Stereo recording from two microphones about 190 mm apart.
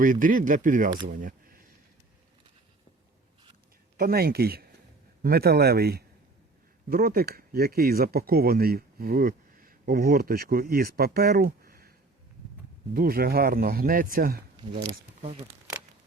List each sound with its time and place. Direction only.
0.0 s speech: 45° right (ahead or behind)
1.0 s camera: 50° right (ahead or behind)
3.9 s speech: 55° right (ahead or behind)
12.9 s speech: 50° right (ahead or behind)
14.5 s speech: 25° right (ahead or behind)